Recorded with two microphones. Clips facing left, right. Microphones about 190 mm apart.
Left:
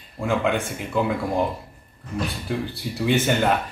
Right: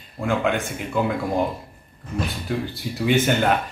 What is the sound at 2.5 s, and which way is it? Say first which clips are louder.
Speech: right 1 dB; centre (ahead or behind).